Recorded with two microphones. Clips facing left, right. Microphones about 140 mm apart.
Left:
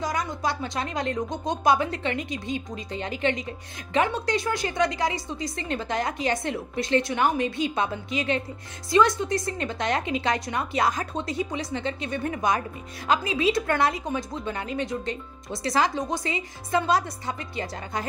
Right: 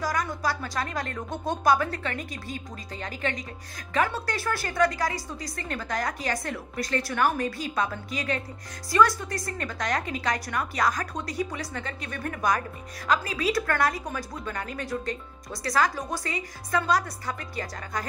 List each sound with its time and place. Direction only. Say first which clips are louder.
0.0 s a woman's voice: left 1 dB; 20° left (ahead or behind)